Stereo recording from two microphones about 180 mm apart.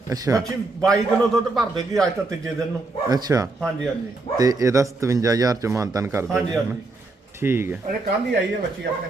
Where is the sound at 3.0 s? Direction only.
20° right (ahead or behind).